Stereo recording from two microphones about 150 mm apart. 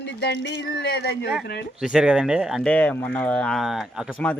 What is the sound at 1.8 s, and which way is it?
Speech, 5° right (ahead or behind).